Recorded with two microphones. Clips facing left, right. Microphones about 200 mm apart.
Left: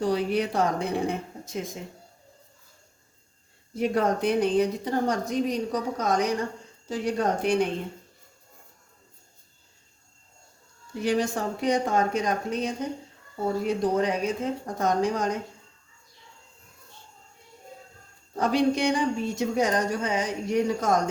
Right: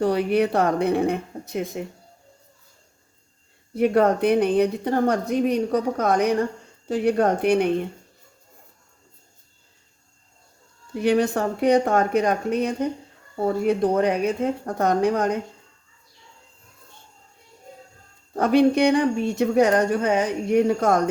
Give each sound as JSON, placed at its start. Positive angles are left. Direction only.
{"t": 0.0, "sound": "speech", "side_deg": -60}
{"t": 3.8, "sound": "speech", "side_deg": -60}
{"t": 10.9, "sound": "speech", "side_deg": -60}
{"t": 18.3, "sound": "speech", "side_deg": -60}